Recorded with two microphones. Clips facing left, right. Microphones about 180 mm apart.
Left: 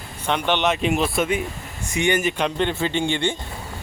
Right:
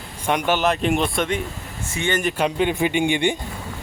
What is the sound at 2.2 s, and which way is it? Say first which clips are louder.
Speech: right 1 dB; 5° right (ahead or behind).